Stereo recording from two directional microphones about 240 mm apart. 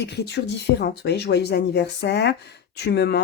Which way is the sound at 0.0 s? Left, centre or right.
Left.